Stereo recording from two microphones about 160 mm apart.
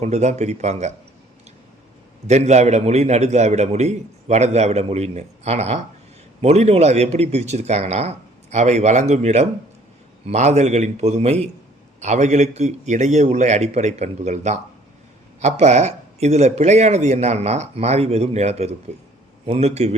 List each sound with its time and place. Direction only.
0.0 s a man's voice: 45° right (ahead or behind)
2.2 s a man's voice: 45° right (ahead or behind)